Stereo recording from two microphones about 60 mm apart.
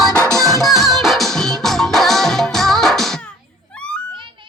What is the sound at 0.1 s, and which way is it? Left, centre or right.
Music, right.